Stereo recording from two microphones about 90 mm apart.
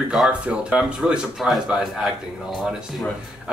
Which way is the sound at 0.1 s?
5° right (ahead or behind).